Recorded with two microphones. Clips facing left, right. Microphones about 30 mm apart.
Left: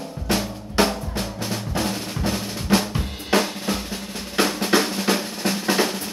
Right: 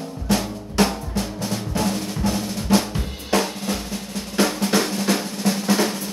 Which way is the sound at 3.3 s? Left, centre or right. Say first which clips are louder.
Left 1 dB; left.